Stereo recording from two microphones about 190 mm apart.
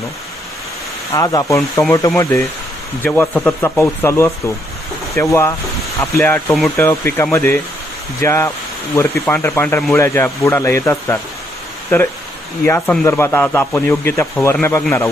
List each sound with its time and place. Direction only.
1.1 s speech: 20° left (ahead or behind)
12.6 s speech: 10° left (ahead or behind)